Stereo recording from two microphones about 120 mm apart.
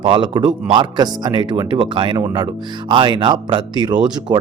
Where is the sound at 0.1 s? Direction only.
40° right (ahead or behind).